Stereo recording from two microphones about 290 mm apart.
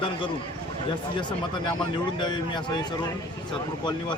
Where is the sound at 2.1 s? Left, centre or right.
Centre.